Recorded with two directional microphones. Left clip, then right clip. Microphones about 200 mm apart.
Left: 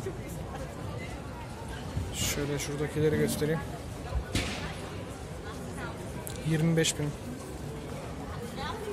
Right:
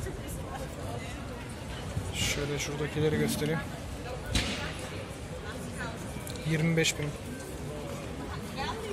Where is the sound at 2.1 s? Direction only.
25° left (ahead or behind).